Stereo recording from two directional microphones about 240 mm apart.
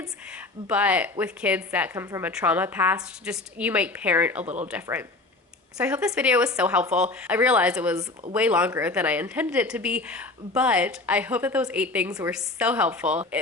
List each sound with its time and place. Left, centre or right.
0.0 s a sound: centre
1.2 s speech: centre
4.4 s speech: right
4.7 s speech: centre